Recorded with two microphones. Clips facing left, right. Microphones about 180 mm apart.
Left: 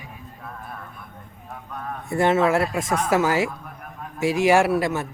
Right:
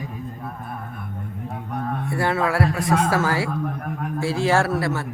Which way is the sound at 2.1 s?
20° left (ahead or behind).